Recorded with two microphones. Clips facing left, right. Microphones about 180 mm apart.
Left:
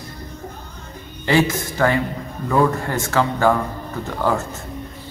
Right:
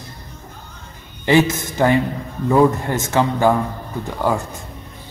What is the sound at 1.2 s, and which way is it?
Speech, 20° right (ahead or behind).